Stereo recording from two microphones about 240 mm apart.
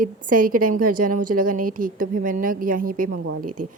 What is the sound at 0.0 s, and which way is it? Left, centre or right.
A woman's voice, right.